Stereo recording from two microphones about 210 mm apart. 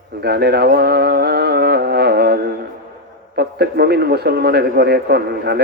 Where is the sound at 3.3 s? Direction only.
50° right (ahead or behind).